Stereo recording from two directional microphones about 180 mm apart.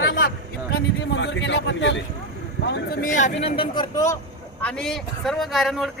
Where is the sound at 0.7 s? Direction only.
80° left.